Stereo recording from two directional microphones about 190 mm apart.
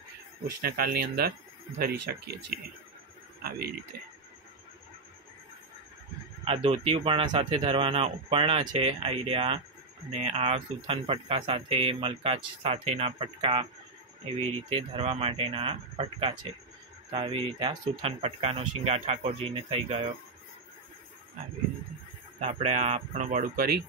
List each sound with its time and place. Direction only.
0.6 s a man's voice: 55° right (ahead or behind)
6.4 s speech: 30° right (ahead or behind)
22.4 s speech: 35° right (ahead or behind)